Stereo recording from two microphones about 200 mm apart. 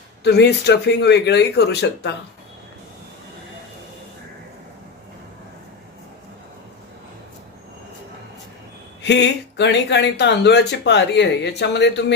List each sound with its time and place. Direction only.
0.3 s speech: 55° left (ahead or behind)
9.0 s speech: 60° left (ahead or behind)